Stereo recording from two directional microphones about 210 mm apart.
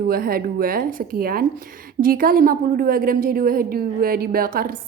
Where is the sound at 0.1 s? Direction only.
45° right (ahead or behind).